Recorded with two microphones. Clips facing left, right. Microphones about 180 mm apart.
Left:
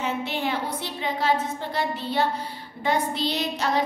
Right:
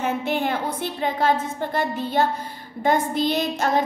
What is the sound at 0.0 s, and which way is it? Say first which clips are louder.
Child singing: right 4 dB; 50° right (ahead or behind).